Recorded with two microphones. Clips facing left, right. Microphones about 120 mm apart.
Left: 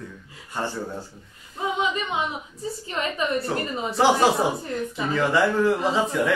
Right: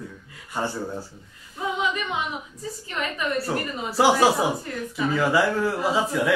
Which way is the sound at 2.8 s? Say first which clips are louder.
Left 2 dB; 25° left (ahead or behind).